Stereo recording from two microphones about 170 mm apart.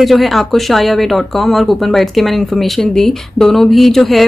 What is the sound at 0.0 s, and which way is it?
Speech, centre (ahead or behind).